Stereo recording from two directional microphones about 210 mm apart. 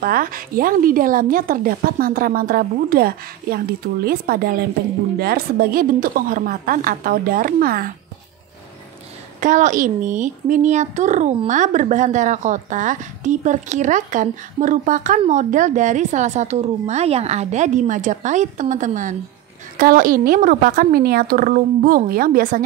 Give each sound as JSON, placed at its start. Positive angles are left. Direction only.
{"t": 0.0, "sound": "a woman's voice", "side_deg": -45}
{"t": 9.4, "sound": "a child's voice", "side_deg": -35}